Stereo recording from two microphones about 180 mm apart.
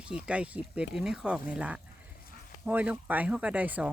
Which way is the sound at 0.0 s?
5° right (ahead or behind).